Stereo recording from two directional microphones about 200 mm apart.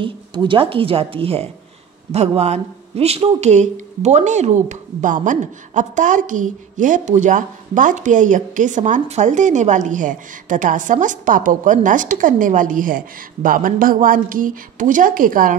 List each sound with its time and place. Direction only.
0.0 s speech: 25° right (ahead or behind); by 15.5 s 45° right (ahead or behind)